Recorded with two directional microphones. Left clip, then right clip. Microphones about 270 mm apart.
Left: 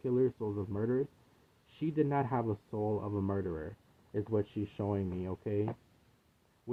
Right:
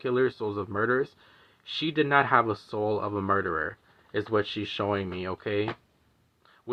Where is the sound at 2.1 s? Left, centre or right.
Right.